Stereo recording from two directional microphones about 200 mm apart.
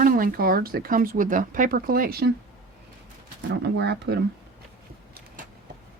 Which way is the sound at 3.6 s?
55° right (ahead or behind).